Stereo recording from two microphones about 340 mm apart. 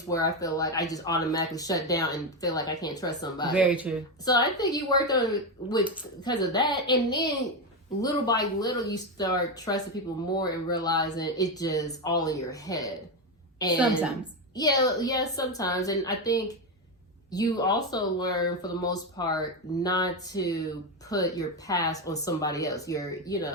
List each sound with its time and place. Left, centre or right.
0.1 s speech: centre
3.5 s speech: centre
4.3 s speech: centre
5.8 s speech: centre
6.2 s speech: centre